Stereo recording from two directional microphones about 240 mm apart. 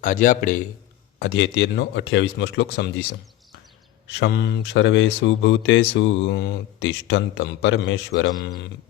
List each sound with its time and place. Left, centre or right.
0.0 s a man's voice: left
1.2 s speech: left
4.1 s speech: left